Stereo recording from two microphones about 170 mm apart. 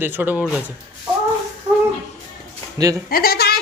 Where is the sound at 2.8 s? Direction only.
20° right (ahead or behind).